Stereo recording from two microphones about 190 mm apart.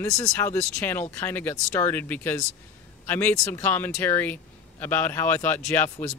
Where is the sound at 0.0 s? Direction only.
15° left (ahead or behind).